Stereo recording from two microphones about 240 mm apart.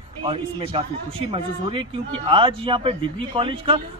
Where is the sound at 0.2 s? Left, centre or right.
Right.